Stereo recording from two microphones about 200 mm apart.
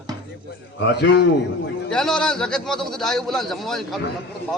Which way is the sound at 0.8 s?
60° left (ahead or behind).